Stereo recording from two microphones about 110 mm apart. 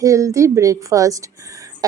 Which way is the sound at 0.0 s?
30° right (ahead or behind).